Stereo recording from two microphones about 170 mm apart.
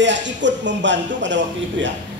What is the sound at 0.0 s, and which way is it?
A man's voice, 90° right.